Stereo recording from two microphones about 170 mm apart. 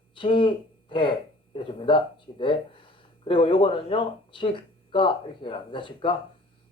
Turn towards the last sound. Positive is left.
turn(degrees=30)  # may be behind; listen again after turning